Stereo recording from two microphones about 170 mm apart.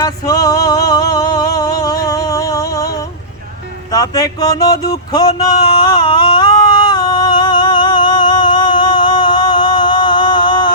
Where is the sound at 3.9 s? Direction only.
20° left (ahead or behind).